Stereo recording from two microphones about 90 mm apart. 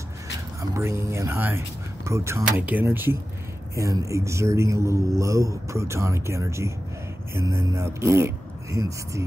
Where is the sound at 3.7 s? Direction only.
35° right (ahead or behind).